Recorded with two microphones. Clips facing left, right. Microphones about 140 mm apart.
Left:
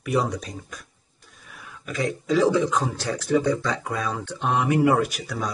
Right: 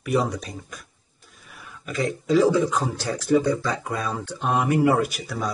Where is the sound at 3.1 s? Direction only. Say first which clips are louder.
Right 2 dB; 5° right (ahead or behind).